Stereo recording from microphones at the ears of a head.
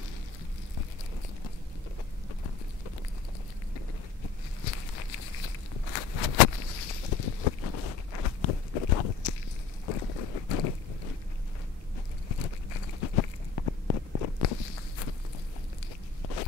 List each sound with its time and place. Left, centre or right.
3.7 s a sound: left
9.8 s boat: left
12.3 s walk: left